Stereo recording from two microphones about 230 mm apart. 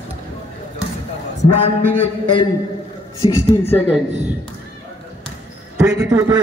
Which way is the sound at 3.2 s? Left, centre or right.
Centre.